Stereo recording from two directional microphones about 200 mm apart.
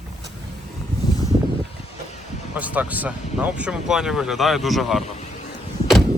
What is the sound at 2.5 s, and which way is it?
Speech, 10° right (ahead or behind).